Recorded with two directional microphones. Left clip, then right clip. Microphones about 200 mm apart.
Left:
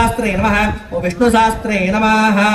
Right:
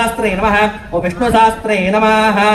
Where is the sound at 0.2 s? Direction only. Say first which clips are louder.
Right 3 dB; 40° left (ahead or behind).